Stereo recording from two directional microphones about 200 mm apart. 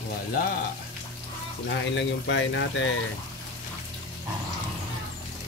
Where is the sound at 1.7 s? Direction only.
65° left (ahead or behind).